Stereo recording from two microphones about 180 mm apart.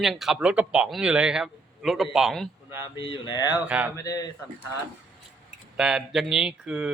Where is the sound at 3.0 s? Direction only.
25° left (ahead or behind).